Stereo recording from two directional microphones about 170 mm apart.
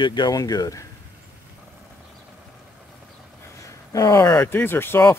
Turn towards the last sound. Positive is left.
turn(degrees=15)  # may be behind; listen again after turning